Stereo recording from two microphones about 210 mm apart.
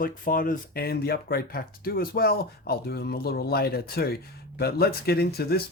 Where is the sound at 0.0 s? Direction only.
40° left (ahead or behind).